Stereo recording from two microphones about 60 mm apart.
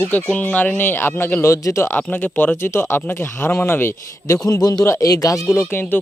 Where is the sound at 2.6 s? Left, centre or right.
Left.